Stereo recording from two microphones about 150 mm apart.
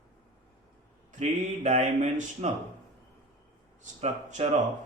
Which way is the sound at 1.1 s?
50° right (ahead or behind).